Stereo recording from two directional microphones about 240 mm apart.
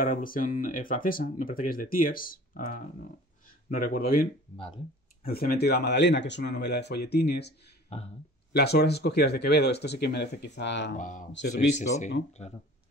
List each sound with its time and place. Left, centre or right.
0.0 s speech: left
7.9 s speech: left
8.5 s speech: left
11.0 s speech: left